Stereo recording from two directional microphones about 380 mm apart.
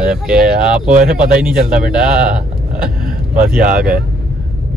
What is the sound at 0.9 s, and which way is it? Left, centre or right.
Speech, right.